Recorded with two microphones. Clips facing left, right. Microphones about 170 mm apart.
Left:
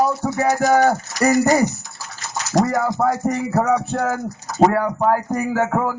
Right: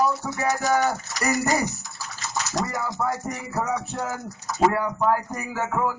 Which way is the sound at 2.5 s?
55° left (ahead or behind).